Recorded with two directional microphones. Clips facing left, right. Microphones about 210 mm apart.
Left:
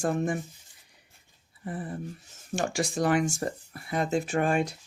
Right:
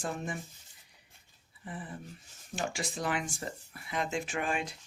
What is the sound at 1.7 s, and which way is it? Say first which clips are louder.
Speech: left 7 dB; 45° left (ahead or behind).